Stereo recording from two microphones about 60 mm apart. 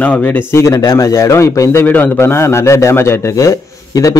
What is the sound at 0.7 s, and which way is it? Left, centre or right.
A man's voice, left.